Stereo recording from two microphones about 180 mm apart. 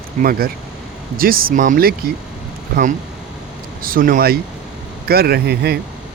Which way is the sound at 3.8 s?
50° right (ahead or behind).